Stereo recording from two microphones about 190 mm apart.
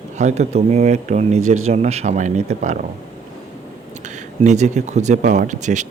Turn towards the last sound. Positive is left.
turn(degrees=-40)  # may be behind; listen again after turning